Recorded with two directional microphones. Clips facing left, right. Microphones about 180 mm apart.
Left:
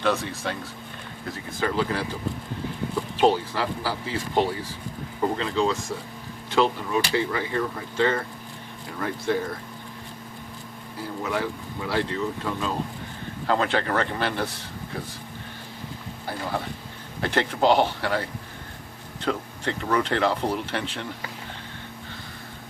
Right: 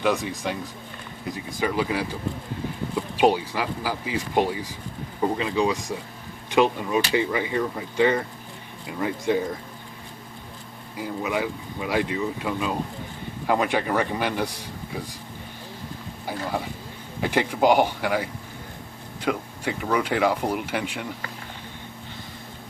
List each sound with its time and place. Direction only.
0.0 s speech: 15° right (ahead or behind)
3.2 s speech: 10° right (ahead or behind)
10.9 s speech: 15° right (ahead or behind)
16.2 s speech: 10° right (ahead or behind)